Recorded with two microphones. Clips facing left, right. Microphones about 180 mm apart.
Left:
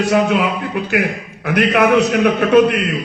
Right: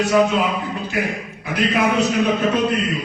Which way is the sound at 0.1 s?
65° left (ahead or behind).